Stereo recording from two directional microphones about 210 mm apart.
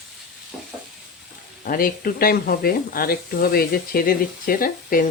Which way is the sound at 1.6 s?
40° left (ahead or behind).